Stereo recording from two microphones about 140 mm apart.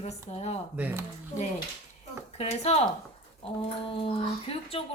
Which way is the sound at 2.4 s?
50° left (ahead or behind).